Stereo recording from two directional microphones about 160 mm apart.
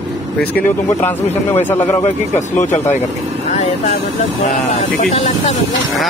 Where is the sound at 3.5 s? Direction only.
40° left (ahead or behind).